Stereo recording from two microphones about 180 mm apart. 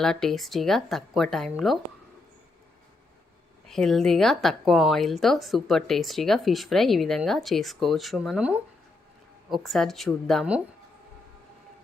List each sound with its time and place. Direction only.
0.0 s a woman's voice: 5° left (ahead or behind)
3.7 s a woman's voice: centre (ahead or behind)